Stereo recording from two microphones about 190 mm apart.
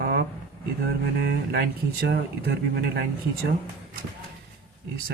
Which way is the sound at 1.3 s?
55° right (ahead or behind).